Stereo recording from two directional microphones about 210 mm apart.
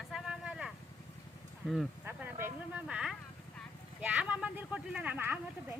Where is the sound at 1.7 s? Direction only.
5° right (ahead or behind).